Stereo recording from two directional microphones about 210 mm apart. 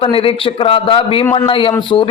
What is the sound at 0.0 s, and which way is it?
A man's voice, 25° left (ahead or behind).